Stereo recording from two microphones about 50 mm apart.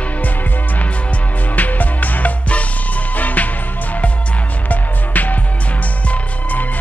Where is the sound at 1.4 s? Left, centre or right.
Left.